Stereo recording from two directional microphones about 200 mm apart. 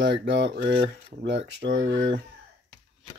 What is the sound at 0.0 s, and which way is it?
Speech, 65° right (ahead or behind).